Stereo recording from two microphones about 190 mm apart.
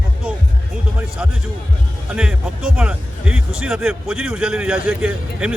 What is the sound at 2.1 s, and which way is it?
Speech, 5° right (ahead or behind).